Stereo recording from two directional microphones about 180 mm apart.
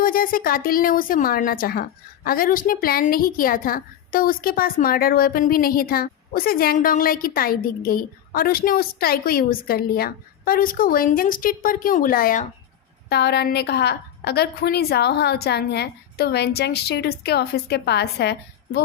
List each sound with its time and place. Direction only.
0.0 s speech: 50° left (ahead or behind)
13.1 s a woman's voice: 70° left (ahead or behind)